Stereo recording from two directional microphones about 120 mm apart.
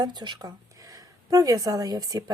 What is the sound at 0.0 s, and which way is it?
Speech, 40° right (ahead or behind).